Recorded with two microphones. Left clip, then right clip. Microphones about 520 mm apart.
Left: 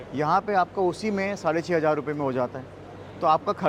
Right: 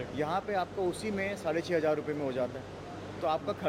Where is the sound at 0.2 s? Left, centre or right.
Left.